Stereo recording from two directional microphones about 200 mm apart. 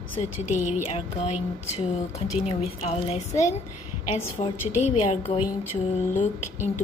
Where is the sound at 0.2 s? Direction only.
35° left (ahead or behind).